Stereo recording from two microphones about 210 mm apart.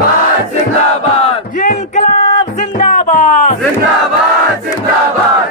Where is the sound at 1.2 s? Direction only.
35° left (ahead or behind).